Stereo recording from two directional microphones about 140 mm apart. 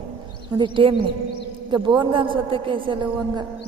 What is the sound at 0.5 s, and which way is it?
Mantra, 35° right (ahead or behind).